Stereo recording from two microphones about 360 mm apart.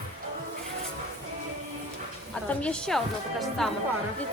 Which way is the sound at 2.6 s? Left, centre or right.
Centre.